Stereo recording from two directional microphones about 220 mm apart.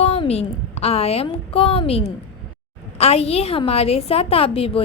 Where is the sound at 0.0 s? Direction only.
30° left (ahead or behind).